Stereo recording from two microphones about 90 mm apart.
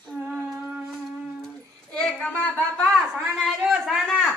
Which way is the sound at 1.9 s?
10° left (ahead or behind).